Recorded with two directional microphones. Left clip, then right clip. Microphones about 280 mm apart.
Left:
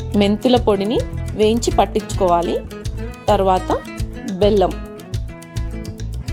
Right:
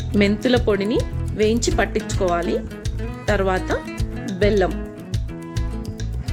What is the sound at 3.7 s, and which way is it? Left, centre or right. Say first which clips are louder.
Music: left 3 dB; centre.